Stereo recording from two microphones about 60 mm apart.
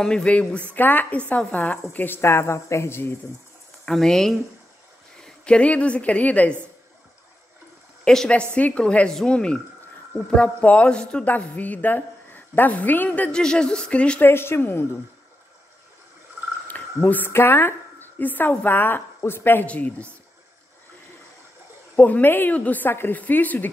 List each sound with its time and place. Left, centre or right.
0.0 s speech: centre
0.7 s a woman's voice: left
3.8 s a woman's voice: centre; by 6.5 s left
8.0 s a woman's voice: centre
8.5 s a woman's voice: left
11.2 s a woman's voice: left
13.3 s speech: centre
14.2 s speech: left
16.6 s cricket: left
17.3 s a woman's voice: left
19.6 s a woman's voice: left
21.9 s a woman's voice: left